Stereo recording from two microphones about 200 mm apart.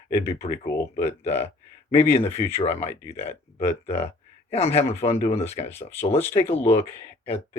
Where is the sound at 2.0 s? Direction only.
10° left (ahead or behind).